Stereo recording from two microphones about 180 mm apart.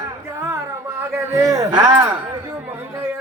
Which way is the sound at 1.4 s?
20° right (ahead or behind).